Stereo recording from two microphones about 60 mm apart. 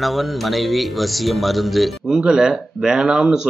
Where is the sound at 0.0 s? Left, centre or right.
Centre.